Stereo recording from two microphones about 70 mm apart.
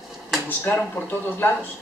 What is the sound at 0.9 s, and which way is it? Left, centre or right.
Speech, left.